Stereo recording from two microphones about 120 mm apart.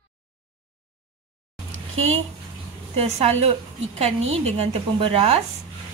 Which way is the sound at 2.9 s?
60° right (ahead or behind).